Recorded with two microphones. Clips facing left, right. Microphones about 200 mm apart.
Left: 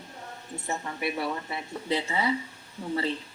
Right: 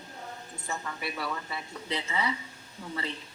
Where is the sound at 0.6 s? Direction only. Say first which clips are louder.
Left 5 dB; 25° left (ahead or behind).